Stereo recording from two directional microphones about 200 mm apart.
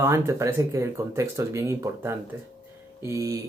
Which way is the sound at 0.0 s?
15° right (ahead or behind).